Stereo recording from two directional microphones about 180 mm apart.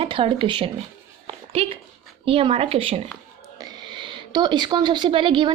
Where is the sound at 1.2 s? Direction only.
35° right (ahead or behind).